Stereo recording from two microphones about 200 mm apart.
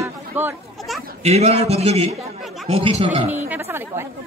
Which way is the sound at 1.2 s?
30° right (ahead or behind).